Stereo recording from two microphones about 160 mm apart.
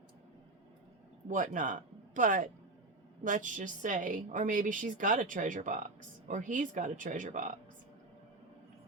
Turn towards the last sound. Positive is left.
turn(degrees=-55)  # may be behind; listen again after turning